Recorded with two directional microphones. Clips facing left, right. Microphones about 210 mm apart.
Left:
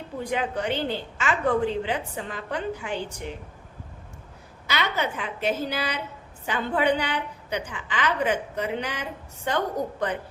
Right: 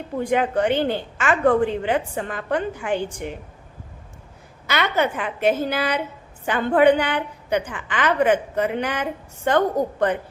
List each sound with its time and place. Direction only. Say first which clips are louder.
0.2 s a woman's voice: right 7 dB; 55° right (ahead or behind)
4.7 s a woman's voice: right 6 dB; 55° right (ahead or behind)